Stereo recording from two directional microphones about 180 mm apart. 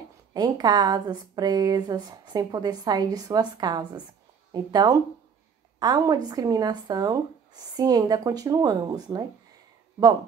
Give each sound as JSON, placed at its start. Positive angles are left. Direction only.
{"t": 0.3, "sound": "speech", "side_deg": -20}